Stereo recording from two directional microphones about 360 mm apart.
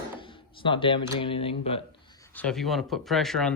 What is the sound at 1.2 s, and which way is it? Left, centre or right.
Speech, centre.